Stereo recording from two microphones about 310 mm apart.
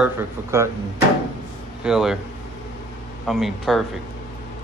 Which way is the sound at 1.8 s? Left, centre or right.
Centre.